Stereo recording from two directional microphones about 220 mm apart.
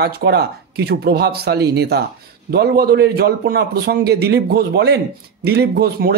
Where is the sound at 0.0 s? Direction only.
45° right (ahead or behind).